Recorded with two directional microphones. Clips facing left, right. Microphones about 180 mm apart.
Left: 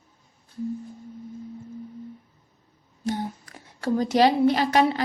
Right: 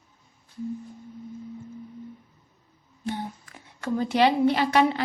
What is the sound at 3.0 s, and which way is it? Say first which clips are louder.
Speech: left 3 dB; 40° left (ahead or behind).